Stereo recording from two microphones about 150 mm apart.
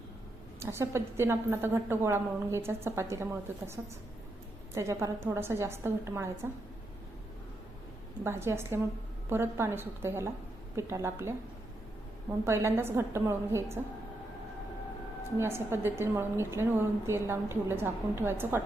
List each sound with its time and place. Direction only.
0.6 s a woman's voice: 15° right (ahead or behind)
4.7 s a woman's voice: 20° right (ahead or behind)
8.2 s a woman's voice: 15° right (ahead or behind)
12.5 s a woman's voice: 15° right (ahead or behind)
15.4 s a woman's voice: 15° right (ahead or behind)